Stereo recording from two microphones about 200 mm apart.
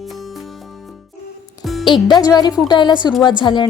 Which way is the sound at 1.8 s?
20° left (ahead or behind).